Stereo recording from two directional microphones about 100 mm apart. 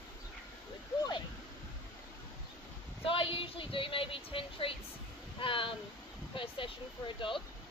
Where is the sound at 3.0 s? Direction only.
60° left (ahead or behind).